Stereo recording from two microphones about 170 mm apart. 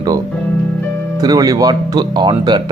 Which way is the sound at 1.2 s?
20° right (ahead or behind).